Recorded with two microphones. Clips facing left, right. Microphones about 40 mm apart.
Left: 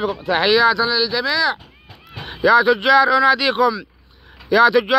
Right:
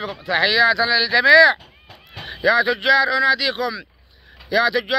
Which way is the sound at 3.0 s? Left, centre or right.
Centre.